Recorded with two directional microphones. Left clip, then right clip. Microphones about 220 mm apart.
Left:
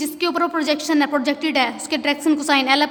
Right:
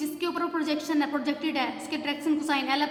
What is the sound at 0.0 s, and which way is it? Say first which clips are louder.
A woman's voice: left 9 dB; 40° left (ahead or behind).